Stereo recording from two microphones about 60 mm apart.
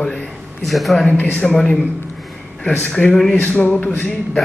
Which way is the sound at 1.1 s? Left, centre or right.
Left.